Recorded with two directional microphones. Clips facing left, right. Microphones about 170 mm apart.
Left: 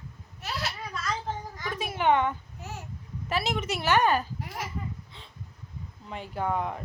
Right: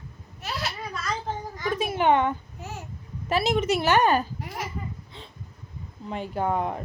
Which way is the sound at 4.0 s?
30° right (ahead or behind).